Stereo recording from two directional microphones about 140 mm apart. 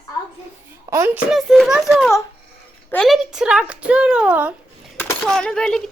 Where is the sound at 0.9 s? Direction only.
15° right (ahead or behind).